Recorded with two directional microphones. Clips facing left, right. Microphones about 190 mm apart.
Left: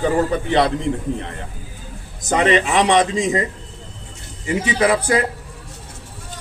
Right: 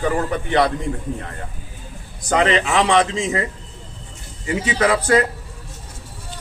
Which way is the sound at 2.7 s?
20° left (ahead or behind).